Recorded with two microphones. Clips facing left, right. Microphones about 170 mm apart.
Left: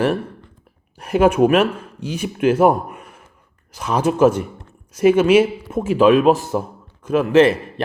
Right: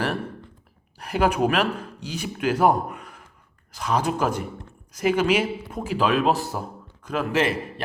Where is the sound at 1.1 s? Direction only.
20° left (ahead or behind).